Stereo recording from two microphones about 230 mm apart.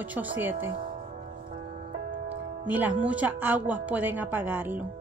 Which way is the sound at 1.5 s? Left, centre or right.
Right.